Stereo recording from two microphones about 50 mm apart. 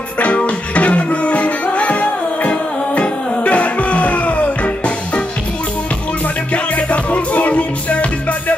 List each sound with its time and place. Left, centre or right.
0.2 s music: left
6.5 s music: left